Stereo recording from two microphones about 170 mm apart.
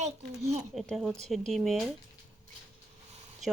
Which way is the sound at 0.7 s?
Centre (ahead or behind).